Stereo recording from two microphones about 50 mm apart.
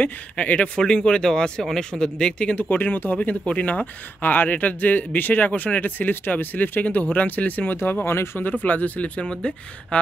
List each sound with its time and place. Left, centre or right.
0.0 s speech: left
4.2 s speech: left
7.7 s speech: left
8.5 s speech: left
9.2 s speech: centre